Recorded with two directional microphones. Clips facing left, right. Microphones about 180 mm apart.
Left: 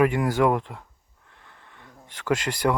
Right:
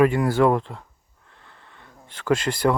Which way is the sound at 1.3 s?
15° left (ahead or behind).